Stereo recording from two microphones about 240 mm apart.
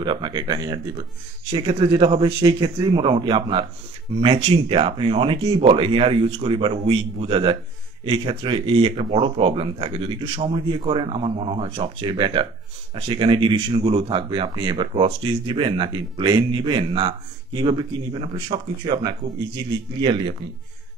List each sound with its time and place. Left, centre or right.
0.0 s speech: centre